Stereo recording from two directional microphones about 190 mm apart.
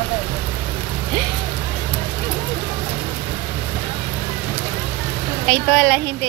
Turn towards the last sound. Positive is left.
turn(degrees=5)  # may be behind; listen again after turning